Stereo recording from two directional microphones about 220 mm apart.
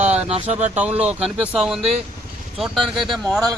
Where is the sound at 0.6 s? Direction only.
5° right (ahead or behind).